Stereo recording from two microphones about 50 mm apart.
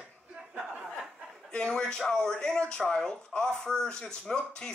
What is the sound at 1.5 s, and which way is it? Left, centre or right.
Speech, centre.